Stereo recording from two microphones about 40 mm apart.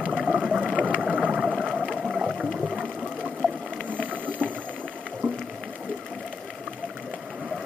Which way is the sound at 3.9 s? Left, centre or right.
Right.